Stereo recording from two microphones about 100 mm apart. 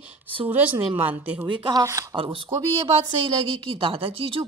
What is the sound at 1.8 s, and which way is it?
Speech, 30° right (ahead or behind).